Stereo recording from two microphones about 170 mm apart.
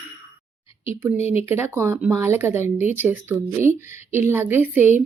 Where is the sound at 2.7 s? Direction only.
45° left (ahead or behind).